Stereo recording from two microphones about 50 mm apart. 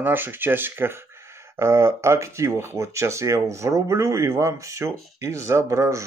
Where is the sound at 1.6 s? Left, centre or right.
Right.